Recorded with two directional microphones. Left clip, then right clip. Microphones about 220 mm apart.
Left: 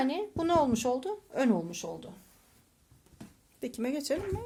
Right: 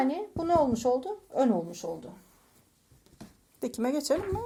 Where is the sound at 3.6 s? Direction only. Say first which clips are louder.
Right 4 dB; 10° right (ahead or behind).